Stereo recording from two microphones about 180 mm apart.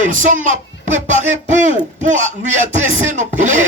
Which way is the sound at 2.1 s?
45° right (ahead or behind).